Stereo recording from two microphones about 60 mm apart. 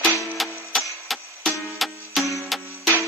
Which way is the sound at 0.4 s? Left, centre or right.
Centre.